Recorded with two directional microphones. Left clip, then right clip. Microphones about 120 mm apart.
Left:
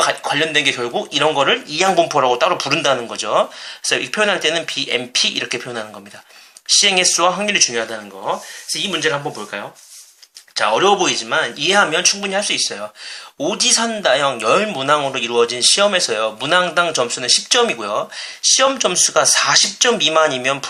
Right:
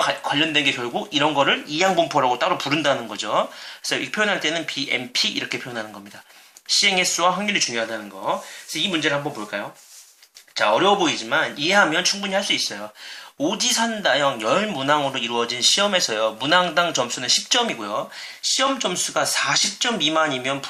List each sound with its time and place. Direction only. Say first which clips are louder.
0.0 s speech: left 4 dB; 40° left (ahead or behind)